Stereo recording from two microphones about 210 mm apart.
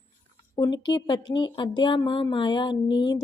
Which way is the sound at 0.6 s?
20° left (ahead or behind).